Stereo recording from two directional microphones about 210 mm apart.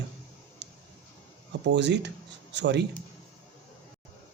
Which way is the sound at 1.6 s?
55° right (ahead or behind).